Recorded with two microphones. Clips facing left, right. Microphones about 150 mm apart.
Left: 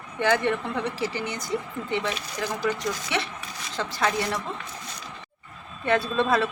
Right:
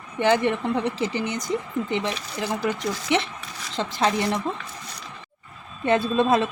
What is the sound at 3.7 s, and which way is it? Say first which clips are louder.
Speech: right 3 dB; 25° right (ahead or behind).